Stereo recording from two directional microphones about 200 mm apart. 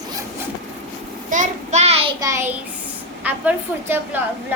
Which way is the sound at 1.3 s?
35° right (ahead or behind).